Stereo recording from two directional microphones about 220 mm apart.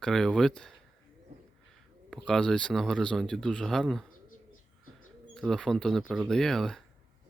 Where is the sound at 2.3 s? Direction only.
5° left (ahead or behind).